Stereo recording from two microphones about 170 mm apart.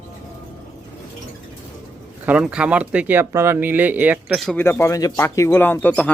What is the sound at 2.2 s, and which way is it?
Speech, 5° right (ahead or behind).